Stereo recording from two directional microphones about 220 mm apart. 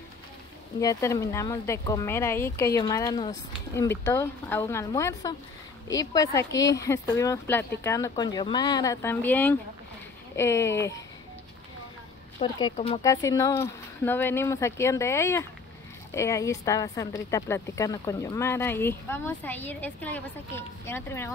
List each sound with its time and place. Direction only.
0.7 s speech: 15° left (ahead or behind)
12.4 s speech: 20° left (ahead or behind)
13.0 s speech: 15° left (ahead or behind)